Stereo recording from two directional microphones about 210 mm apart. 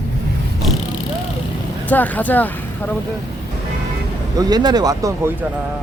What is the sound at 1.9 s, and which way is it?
Speech, 10° left (ahead or behind).